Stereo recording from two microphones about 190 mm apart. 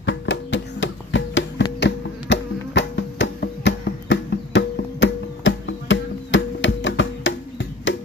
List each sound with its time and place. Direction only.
0.0 s music: 75° left (ahead or behind)